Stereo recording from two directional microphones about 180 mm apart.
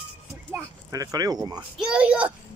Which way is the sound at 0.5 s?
20° right (ahead or behind).